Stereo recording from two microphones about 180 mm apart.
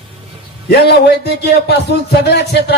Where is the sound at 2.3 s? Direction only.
65° left (ahead or behind).